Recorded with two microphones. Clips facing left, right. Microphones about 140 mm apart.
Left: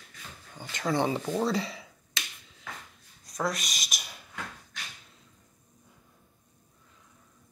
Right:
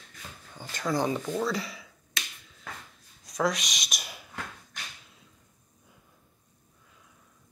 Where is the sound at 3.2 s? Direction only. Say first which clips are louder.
Right 3 dB; centre (ahead or behind).